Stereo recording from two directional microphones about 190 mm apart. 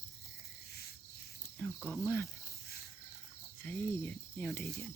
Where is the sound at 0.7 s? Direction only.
55° left (ahead or behind).